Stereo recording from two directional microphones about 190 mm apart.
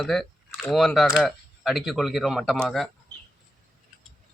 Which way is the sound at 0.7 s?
Centre (ahead or behind).